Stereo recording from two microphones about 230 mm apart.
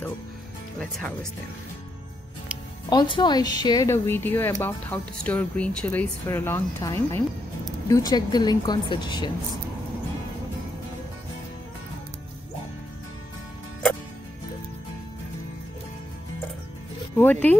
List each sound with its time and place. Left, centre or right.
0.7 s speech: centre
2.9 s speech: centre
17.2 s speech: centre